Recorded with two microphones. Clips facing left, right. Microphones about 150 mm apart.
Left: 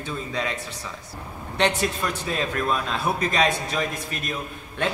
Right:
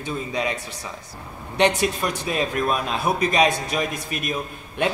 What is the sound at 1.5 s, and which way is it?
A man's voice, 15° right (ahead or behind).